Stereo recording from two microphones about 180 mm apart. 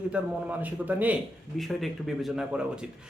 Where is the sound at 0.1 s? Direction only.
10° right (ahead or behind).